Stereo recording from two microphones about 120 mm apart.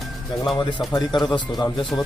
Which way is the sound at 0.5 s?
40° left (ahead or behind).